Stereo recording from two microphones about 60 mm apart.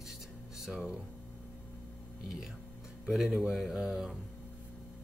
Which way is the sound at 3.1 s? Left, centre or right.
Centre.